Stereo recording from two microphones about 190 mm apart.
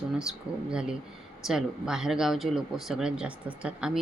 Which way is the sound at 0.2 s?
5° right (ahead or behind).